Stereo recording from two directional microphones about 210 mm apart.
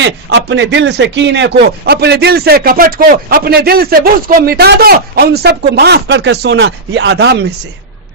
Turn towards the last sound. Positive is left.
turn(degrees=-55)  # may be behind; listen again after turning